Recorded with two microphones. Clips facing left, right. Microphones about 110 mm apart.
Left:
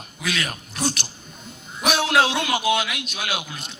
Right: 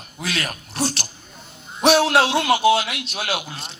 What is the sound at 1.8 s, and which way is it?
Music, 35° right (ahead or behind).